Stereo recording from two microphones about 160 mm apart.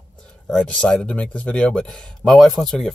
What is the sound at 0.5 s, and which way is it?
Speech, 5° left (ahead or behind).